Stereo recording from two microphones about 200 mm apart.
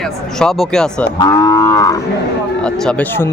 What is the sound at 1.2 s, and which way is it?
Cattle, 20° left (ahead or behind).